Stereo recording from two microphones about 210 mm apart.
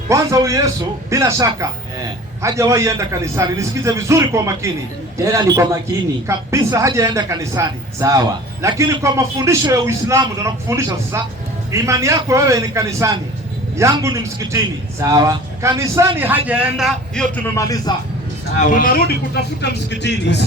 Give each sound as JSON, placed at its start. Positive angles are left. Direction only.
{"t": 0.1, "sound": "a man's voice", "side_deg": -15}
{"t": 17.3, "sound": "a man's voice", "side_deg": 10}
{"t": 18.5, "sound": "speech", "side_deg": 35}